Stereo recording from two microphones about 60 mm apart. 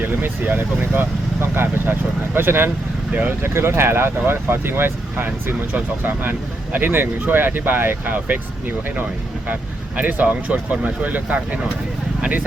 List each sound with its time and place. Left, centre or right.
0.0 s speech: right
3.1 s speech: right
3.4 s speech: right